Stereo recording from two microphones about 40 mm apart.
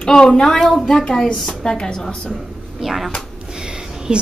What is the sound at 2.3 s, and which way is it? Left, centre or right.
Speech, centre.